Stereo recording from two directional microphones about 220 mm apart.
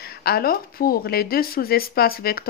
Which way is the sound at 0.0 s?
45° left (ahead or behind).